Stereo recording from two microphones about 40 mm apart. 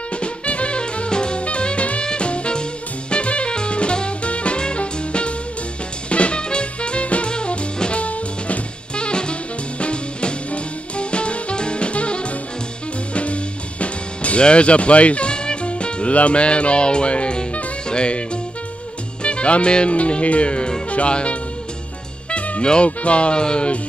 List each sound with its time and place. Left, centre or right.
0.2 s music: left
19.2 s speech: left